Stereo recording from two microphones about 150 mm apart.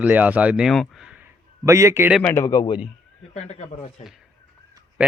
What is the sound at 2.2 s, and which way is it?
Speech, 15° left (ahead or behind).